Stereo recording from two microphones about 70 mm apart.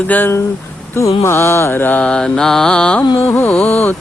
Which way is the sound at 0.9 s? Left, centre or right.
Left.